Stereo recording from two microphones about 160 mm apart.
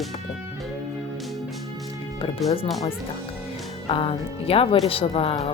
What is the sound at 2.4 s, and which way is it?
Speech, 35° left (ahead or behind).